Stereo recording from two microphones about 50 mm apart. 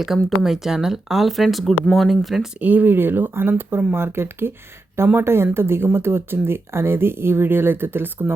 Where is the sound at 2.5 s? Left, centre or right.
Right.